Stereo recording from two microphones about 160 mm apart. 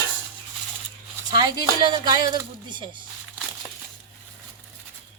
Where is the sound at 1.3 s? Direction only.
25° right (ahead or behind).